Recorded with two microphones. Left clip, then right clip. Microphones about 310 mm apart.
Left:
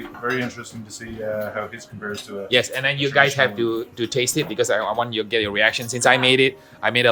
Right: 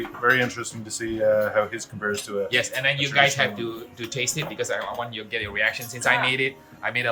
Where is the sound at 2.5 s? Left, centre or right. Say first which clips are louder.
Left 5 dB; left.